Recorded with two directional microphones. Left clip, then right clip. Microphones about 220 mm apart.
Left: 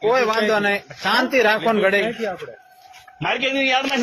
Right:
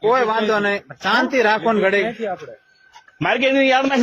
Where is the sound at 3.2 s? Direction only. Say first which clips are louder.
Right 4 dB; 45° right (ahead or behind).